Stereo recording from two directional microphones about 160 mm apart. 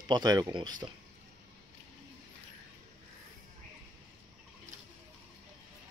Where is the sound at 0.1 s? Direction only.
25° right (ahead or behind).